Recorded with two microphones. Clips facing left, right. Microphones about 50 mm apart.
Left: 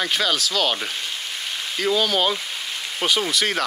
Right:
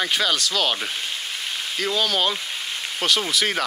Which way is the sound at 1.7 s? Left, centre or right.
Centre.